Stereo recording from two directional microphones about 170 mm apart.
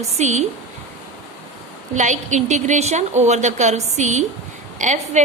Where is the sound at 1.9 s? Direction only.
45° right (ahead or behind).